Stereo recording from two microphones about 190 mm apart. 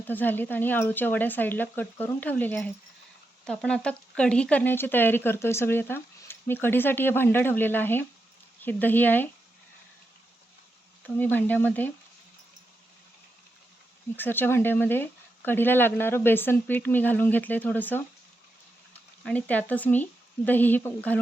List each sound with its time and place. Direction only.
0.0 s speech: 10° left (ahead or behind)
11.0 s speech: 10° left (ahead or behind)
14.2 s speech: 10° left (ahead or behind)
19.2 s speech: 5° left (ahead or behind)